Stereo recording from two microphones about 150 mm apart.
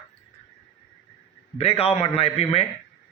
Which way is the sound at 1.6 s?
40° left (ahead or behind).